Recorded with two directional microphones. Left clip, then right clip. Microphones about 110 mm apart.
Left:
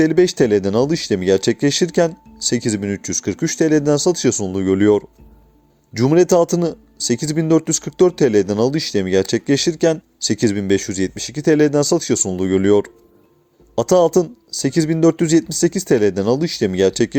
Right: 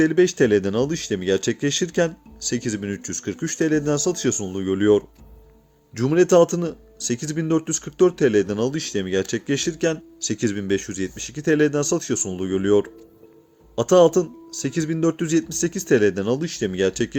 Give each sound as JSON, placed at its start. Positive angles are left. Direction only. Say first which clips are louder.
{"t": 0.0, "sound": "speech", "louder": "left 3 dB", "side_deg": 50}